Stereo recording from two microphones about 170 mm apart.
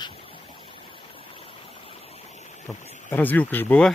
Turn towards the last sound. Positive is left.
turn(degrees=10)  # may be behind; listen again after turning